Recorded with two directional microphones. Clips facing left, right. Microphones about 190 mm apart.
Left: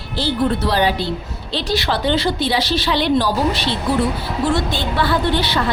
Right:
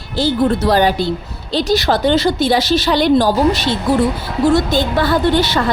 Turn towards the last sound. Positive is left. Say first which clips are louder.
# right 4 dB
turn(degrees=-45)  # may be behind; listen again after turning